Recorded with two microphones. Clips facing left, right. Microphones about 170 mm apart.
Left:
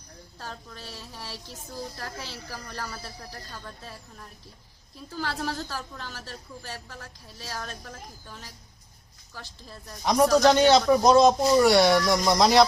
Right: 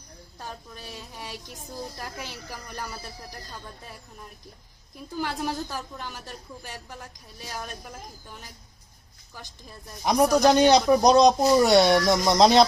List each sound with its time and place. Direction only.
0.3 s speech: 15° right (ahead or behind)
5.1 s speech: 15° right (ahead or behind)
9.3 s speech: 15° right (ahead or behind)